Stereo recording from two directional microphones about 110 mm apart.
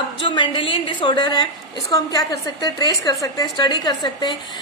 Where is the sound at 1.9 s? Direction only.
30° left (ahead or behind).